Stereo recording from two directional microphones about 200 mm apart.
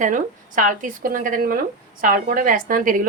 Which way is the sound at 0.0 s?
40° right (ahead or behind).